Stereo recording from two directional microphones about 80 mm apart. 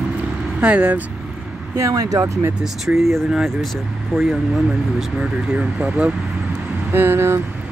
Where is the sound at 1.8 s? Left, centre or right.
Right.